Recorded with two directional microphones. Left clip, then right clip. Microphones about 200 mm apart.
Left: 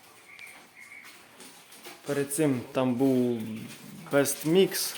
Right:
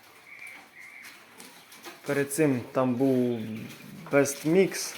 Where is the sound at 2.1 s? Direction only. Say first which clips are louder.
Right 2 dB; centre (ahead or behind).